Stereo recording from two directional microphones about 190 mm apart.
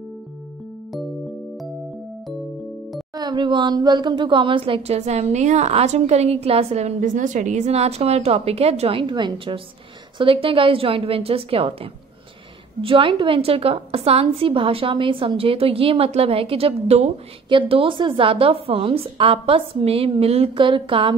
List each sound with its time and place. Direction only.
3.2 s a woman's voice: 25° right (ahead or behind)